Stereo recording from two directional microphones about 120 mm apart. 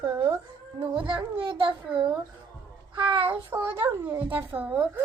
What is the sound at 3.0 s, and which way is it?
Speech, 45° right (ahead or behind).